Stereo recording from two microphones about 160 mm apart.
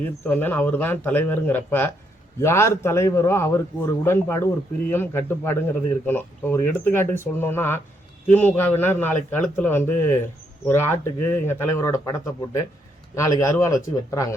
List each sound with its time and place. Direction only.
0.0 s a man's voice: 10° left (ahead or behind)